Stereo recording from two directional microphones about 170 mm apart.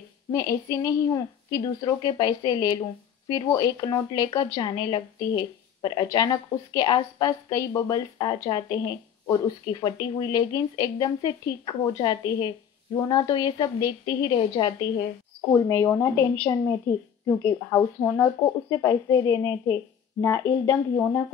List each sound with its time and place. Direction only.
0.3 s speech: 20° left (ahead or behind)